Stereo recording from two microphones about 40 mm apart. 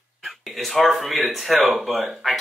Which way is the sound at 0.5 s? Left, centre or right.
Centre.